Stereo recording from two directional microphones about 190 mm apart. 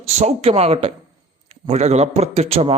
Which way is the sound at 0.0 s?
35° right (ahead or behind).